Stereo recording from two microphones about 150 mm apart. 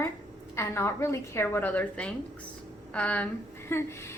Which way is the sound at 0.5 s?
15° left (ahead or behind).